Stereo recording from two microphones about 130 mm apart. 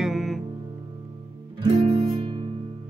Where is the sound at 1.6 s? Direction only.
40° right (ahead or behind).